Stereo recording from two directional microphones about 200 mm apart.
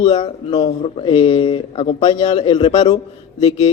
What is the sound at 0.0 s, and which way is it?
A man's voice, 20° left (ahead or behind).